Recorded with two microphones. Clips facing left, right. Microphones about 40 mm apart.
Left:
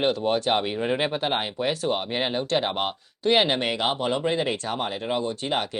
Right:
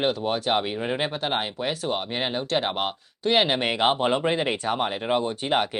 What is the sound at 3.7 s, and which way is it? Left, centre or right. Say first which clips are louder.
Speech: right 3 dB; right.